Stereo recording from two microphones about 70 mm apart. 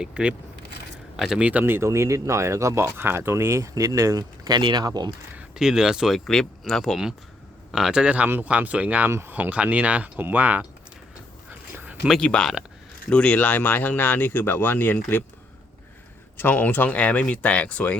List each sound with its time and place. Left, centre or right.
0.0 s speech: centre
1.6 s speech: right
5.5 s speech: centre
9.0 s speech: right
9.3 s speech: right
12.2 s speech: centre; by 15.2 s left
16.4 s speech: left